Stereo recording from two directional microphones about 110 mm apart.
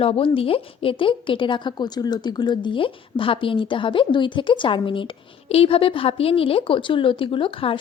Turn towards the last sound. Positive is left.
turn(degrees=55)  # may be behind; listen again after turning